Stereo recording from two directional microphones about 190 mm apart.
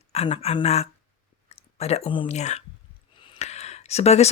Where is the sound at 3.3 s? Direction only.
35° left (ahead or behind).